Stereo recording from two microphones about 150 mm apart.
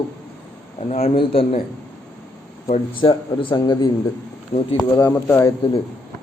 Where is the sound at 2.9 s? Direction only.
35° left (ahead or behind).